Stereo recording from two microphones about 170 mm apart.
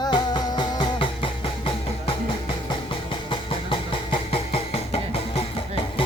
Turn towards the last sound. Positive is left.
turn(degrees=35)  # may be behind; listen again after turning